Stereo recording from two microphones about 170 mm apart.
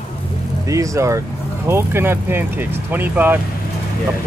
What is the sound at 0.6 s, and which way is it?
Speech, 20° right (ahead or behind).